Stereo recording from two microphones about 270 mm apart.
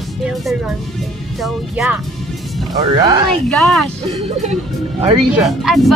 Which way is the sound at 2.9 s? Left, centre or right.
Centre.